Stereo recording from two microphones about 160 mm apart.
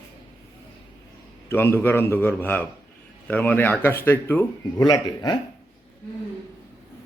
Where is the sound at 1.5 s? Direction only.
15° left (ahead or behind).